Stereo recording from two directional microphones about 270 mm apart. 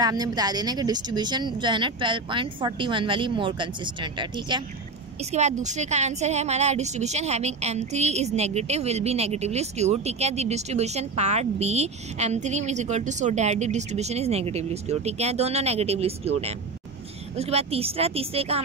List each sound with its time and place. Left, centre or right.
0.0 s a woman's voice: centre